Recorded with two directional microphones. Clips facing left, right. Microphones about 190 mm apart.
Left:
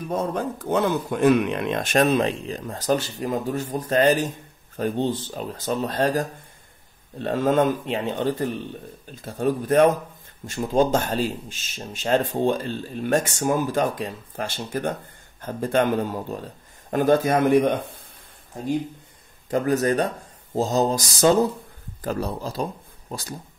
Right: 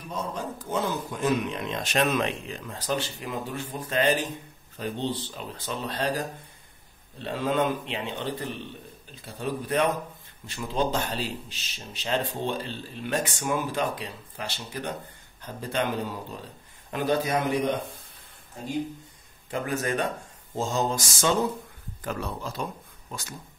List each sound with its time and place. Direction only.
0.1 s speech: 55° left (ahead or behind)
2.0 s a man's voice: 35° left (ahead or behind); by 17.7 s 55° left (ahead or behind)
19.5 s speech: 40° left (ahead or behind)